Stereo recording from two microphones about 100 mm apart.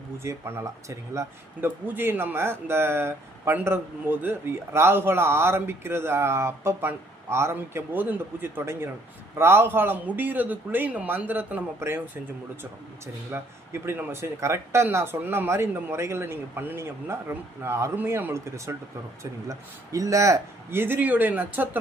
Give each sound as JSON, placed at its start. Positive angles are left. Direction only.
{"t": 0.2, "sound": "speech", "side_deg": -25}
{"t": 1.6, "sound": "speech", "side_deg": -20}
{"t": 13.3, "sound": "speech", "side_deg": -25}